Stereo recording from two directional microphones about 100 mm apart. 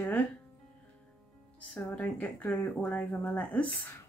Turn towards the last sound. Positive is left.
turn(degrees=15)  # may be behind; listen again after turning